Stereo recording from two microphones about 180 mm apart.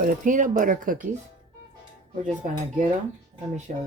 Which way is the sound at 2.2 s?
45° right (ahead or behind).